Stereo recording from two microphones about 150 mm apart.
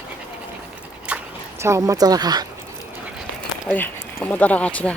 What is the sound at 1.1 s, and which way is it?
Dog, 10° right (ahead or behind).